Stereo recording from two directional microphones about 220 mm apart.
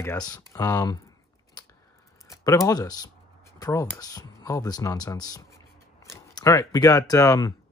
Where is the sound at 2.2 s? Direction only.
15° left (ahead or behind).